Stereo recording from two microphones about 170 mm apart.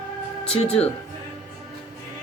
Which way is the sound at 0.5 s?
35° left (ahead or behind).